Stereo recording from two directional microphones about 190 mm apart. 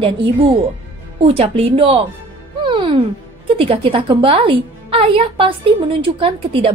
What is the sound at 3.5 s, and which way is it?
A woman's voice, 30° right (ahead or behind).